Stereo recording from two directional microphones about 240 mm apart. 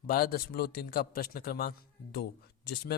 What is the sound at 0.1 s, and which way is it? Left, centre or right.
Speech, left.